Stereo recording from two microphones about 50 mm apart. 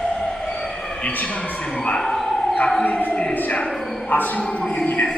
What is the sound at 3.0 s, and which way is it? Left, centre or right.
Speech, left.